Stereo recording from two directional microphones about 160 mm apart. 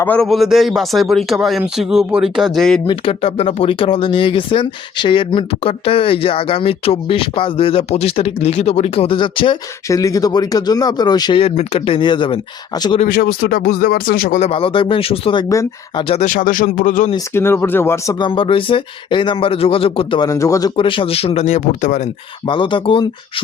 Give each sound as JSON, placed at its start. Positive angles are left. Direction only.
{"t": 0.0, "sound": "speech", "side_deg": 10}
{"t": 0.3, "sound": "speech", "side_deg": 0}
{"t": 2.8, "sound": "speech", "side_deg": 35}
{"t": 13.1, "sound": "speech", "side_deg": 65}
{"t": 14.4, "sound": "speech", "side_deg": 35}
{"t": 16.2, "sound": "a man's voice", "side_deg": 60}
{"t": 17.3, "sound": "speech", "side_deg": 15}
{"t": 18.3, "sound": "speech", "side_deg": 35}
{"t": 22.4, "sound": "speech", "side_deg": 30}